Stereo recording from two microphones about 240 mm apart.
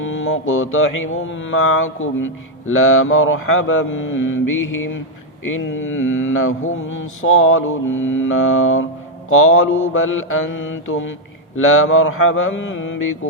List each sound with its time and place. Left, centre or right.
0.0 s mantra: left